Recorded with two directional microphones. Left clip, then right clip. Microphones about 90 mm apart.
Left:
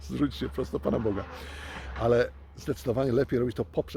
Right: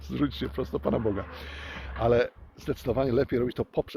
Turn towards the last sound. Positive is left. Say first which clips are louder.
# right 1 dB
turn(degrees=30)  # may be behind; listen again after turning